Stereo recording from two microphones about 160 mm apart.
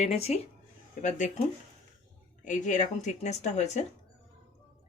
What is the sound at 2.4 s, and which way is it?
Speech, 50° left (ahead or behind).